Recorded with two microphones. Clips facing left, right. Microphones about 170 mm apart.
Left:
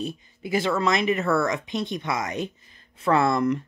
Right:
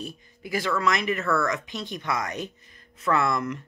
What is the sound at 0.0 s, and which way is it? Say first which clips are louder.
Speech: left 6 dB; 25° left (ahead or behind).